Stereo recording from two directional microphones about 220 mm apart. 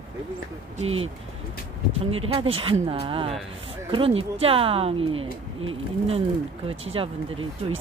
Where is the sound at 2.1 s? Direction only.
25° right (ahead or behind).